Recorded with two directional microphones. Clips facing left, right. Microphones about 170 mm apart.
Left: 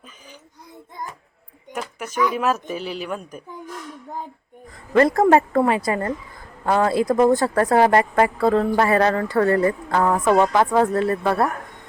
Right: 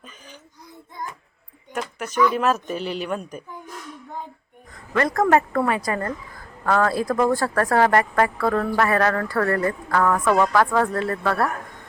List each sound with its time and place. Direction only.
1.7 s speech: 5° left (ahead or behind)
4.9 s speech: 25° left (ahead or behind)